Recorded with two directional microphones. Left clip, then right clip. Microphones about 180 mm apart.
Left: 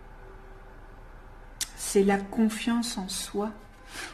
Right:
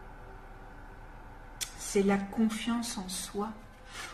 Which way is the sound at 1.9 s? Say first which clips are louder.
Left 5 dB; 55° left (ahead or behind).